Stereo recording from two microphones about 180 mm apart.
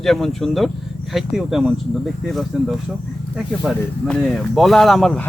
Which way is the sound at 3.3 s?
Centre (ahead or behind).